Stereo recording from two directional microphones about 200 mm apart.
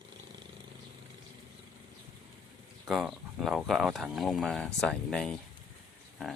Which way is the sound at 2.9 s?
Centre (ahead or behind).